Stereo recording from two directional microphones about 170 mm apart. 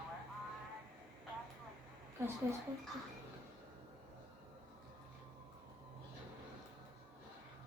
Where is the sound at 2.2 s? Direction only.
15° right (ahead or behind).